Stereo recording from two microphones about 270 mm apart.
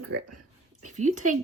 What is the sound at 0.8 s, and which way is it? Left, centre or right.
Speech, right.